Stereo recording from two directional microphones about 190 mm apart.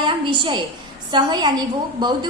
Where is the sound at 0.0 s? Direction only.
25° right (ahead or behind).